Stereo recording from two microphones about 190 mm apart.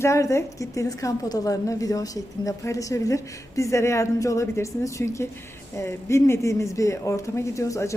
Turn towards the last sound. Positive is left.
turn(degrees=15)  # may be behind; listen again after turning